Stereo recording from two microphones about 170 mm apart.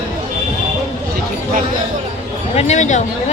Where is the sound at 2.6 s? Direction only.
40° left (ahead or behind).